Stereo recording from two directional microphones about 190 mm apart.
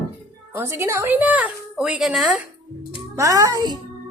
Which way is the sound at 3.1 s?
15° right (ahead or behind).